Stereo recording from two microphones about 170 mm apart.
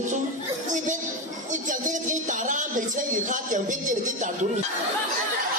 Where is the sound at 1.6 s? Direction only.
50° right (ahead or behind).